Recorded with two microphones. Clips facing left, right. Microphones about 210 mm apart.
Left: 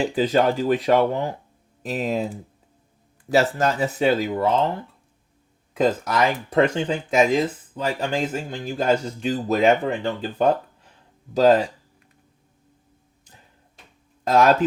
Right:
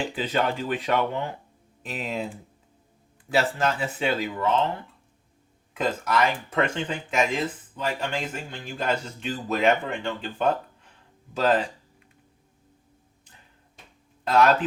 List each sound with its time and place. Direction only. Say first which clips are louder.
0.0 s speech: left 7 dB; 40° left (ahead or behind)
5.7 s speech: left 4 dB; 40° left (ahead or behind)
14.3 s speech: left 3 dB; 45° left (ahead or behind)